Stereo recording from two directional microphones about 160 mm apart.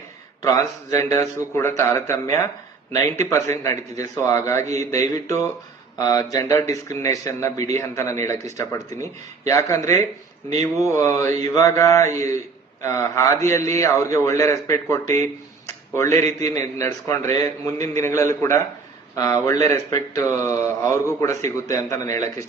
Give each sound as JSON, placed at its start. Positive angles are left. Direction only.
{"t": 0.4, "sound": "speech", "side_deg": 20}